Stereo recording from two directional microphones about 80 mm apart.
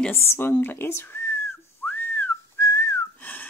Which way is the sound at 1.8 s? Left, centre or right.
Centre.